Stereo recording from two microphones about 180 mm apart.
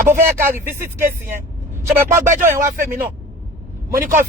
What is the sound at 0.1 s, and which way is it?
Speech, 10° right (ahead or behind).